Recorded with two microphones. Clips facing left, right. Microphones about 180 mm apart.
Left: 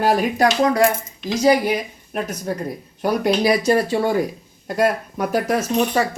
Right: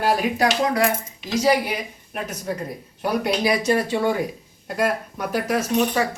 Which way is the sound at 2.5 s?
40° left (ahead or behind).